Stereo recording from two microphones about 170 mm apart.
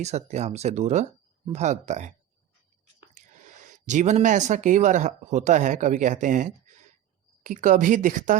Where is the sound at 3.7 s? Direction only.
45° right (ahead or behind).